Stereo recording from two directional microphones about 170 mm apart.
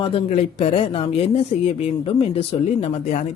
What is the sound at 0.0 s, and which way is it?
Speech, 35° left (ahead or behind).